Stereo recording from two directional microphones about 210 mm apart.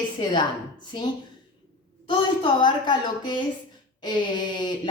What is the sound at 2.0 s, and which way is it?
Speech, 25° left (ahead or behind).